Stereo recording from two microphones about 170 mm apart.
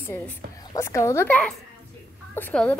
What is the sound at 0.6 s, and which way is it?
A woman's voice, 15° left (ahead or behind).